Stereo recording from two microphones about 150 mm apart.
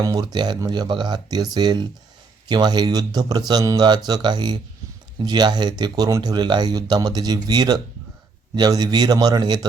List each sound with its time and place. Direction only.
0.0 s speech: 25° right (ahead or behind)